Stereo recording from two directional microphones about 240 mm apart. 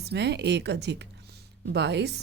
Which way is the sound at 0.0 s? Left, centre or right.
Right.